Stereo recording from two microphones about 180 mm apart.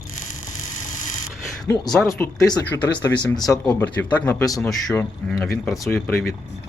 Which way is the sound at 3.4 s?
5° left (ahead or behind).